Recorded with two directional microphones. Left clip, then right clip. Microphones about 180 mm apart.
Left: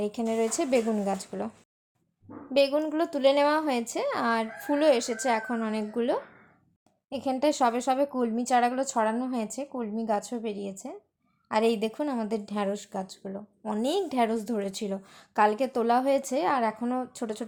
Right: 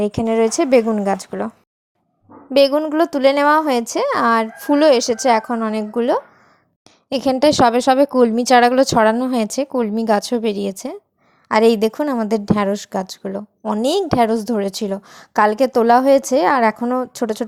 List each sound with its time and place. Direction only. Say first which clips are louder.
0.0 s a woman's voice: right 11 dB; 35° right (ahead or behind)
2.5 s a woman's voice: right 10 dB; 40° right (ahead or behind)